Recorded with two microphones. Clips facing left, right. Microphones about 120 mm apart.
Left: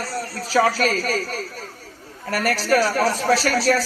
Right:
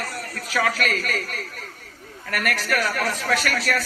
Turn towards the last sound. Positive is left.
turn(degrees=30)  # may be behind; listen again after turning